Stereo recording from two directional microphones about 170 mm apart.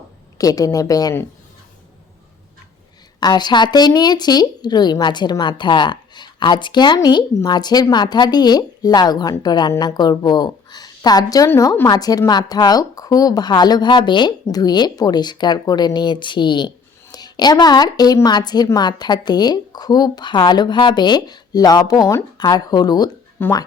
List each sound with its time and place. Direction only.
0.3 s speech: 20° left (ahead or behind)
3.2 s speech: 25° left (ahead or behind)